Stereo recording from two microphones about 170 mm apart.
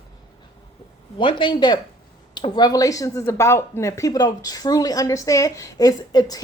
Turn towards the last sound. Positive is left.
turn(degrees=25)  # may be behind; listen again after turning